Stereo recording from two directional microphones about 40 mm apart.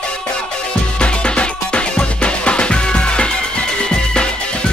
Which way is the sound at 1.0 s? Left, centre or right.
Left.